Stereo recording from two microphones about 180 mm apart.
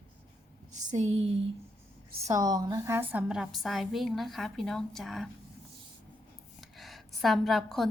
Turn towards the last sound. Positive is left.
turn(degrees=0)  # may be behind; listen again after turning